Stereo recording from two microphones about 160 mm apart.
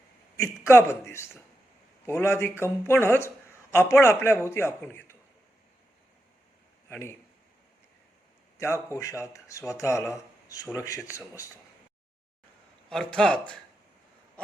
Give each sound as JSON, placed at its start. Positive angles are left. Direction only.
{"t": 0.7, "sound": "a man's voice", "side_deg": 15}
{"t": 6.9, "sound": "a man's voice", "side_deg": 15}
{"t": 8.5, "sound": "speech", "side_deg": 15}
{"t": 12.9, "sound": "speech", "side_deg": 5}